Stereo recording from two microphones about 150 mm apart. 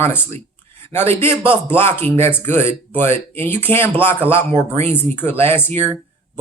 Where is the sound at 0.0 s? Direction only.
15° left (ahead or behind).